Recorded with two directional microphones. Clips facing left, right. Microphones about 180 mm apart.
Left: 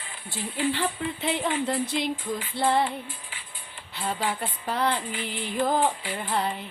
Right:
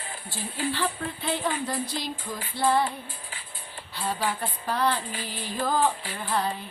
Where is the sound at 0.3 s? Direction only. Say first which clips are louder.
Left 3 dB; 20° left (ahead or behind).